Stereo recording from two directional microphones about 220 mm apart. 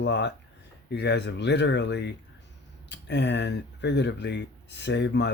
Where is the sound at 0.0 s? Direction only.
50° left (ahead or behind).